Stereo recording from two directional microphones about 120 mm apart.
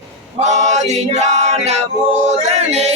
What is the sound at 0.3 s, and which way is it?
Male singing, 75° right (ahead or behind).